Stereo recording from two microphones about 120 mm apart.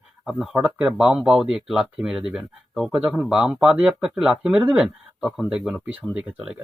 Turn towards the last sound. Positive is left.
turn(degrees=-10)  # may be behind; listen again after turning